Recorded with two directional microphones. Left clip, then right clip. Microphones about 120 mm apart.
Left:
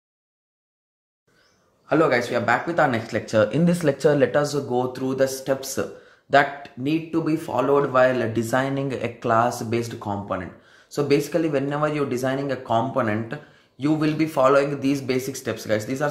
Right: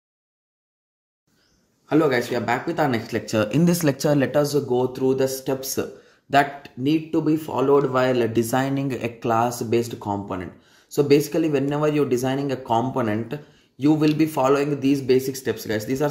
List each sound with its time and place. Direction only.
1.9 s speech: 25° right (ahead or behind)
3.6 s speech: 50° right (ahead or behind); by 16.1 s 15° right (ahead or behind)